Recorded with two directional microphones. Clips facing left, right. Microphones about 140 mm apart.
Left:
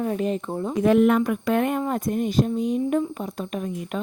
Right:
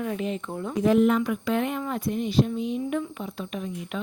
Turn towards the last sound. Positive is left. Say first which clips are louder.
# left 4 dB
turn(degrees=45)  # may be behind; listen again after turning